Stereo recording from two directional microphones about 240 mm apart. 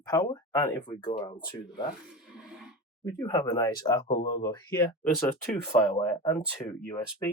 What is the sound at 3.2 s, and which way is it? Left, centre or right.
Speech, centre.